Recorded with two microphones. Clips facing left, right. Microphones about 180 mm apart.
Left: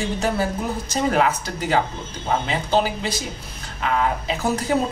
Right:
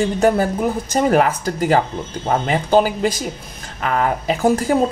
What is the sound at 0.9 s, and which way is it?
Speech, 45° right (ahead or behind).